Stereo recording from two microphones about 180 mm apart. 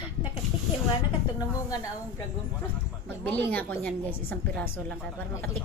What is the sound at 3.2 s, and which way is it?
A woman's voice, 10° left (ahead or behind).